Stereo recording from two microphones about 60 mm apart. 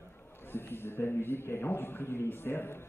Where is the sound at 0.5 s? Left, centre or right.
Left.